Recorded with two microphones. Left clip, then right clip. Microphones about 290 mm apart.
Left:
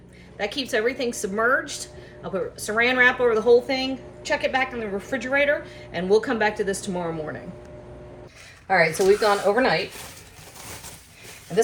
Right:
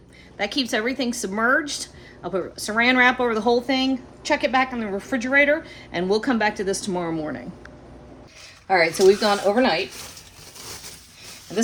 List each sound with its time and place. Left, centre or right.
0.3 s a woman's voice: right
8.7 s speech: right